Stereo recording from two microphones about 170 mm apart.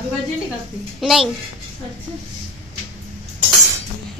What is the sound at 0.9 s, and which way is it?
Speech, centre (ahead or behind).